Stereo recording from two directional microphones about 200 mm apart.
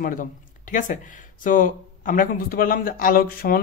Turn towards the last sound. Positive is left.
turn(degrees=45)  # may be behind; listen again after turning